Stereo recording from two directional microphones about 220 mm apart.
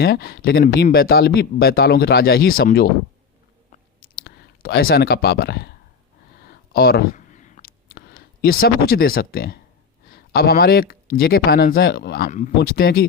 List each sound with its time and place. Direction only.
0.0 s speech: 45° left (ahead or behind)
4.1 s speech: 40° left (ahead or behind)
6.4 s a sound: 45° left (ahead or behind)
10.1 s speech: 45° left (ahead or behind)